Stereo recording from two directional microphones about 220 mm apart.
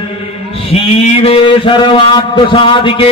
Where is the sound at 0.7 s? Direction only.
30° left (ahead or behind).